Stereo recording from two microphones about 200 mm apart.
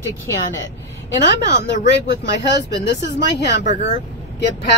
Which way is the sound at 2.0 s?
55° left (ahead or behind).